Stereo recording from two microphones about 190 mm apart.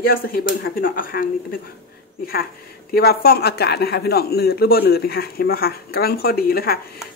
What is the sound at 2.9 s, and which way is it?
A woman's voice, 55° left (ahead or behind).